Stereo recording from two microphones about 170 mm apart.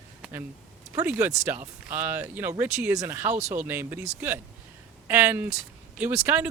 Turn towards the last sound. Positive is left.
turn(degrees=-10)  # may be behind; listen again after turning